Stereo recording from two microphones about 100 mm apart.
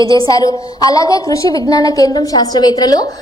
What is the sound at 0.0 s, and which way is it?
A woman's voice, 35° left (ahead or behind).